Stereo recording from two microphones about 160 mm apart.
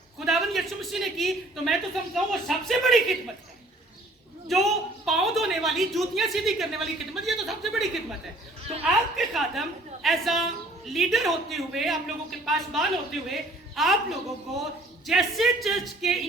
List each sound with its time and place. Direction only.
0.3 s a woman's voice: centre (ahead or behind)
4.4 s a woman's voice: centre (ahead or behind)